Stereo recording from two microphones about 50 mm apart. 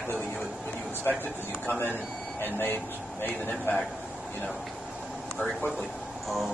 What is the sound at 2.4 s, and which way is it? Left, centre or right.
Speech, left.